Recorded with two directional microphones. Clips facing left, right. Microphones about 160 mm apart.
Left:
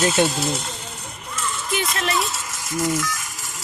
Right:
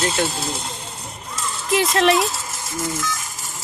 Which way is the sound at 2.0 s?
70° right (ahead or behind).